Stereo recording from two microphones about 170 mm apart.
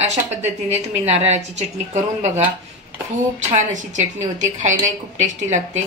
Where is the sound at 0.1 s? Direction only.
40° right (ahead or behind).